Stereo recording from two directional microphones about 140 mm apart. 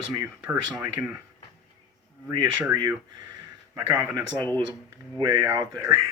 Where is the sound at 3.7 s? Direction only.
20° right (ahead or behind).